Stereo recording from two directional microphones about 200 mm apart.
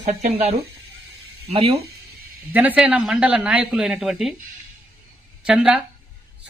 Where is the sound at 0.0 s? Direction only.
35° right (ahead or behind).